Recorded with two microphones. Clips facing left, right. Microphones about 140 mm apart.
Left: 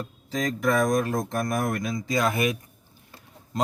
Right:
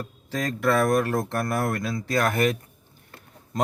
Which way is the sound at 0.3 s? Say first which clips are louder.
Right 1 dB; 65° right (ahead or behind).